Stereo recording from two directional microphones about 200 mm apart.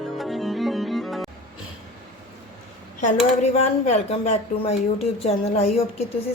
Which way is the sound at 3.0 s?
35° left (ahead or behind).